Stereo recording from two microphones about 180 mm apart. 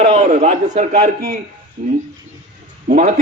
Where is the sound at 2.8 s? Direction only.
50° right (ahead or behind).